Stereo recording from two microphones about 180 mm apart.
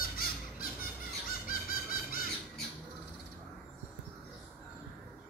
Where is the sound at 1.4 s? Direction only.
50° left (ahead or behind).